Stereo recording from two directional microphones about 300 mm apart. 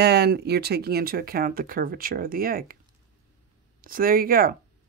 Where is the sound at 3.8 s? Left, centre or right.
Right.